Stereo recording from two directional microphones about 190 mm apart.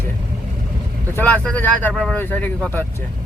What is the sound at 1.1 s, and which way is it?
Speech, 10° left (ahead or behind).